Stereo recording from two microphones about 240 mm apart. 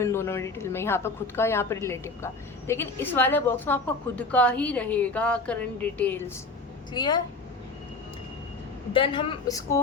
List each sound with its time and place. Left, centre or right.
0.0 s speech: centre
6.9 s speech: centre
8.9 s a woman's voice: left